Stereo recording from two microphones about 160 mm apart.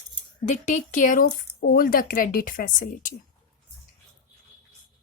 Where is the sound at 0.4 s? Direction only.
50° left (ahead or behind).